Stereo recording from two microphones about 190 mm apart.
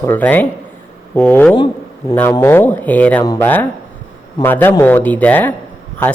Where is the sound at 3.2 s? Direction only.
20° left (ahead or behind).